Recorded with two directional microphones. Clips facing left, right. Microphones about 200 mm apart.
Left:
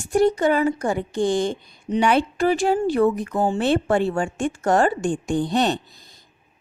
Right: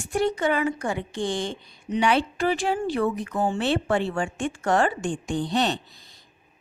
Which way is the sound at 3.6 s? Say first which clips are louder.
Left 5 dB; 45° left (ahead or behind).